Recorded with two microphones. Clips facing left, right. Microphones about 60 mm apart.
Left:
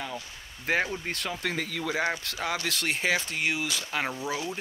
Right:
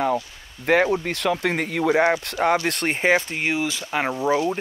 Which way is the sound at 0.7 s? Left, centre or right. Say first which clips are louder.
Right 9 dB; right.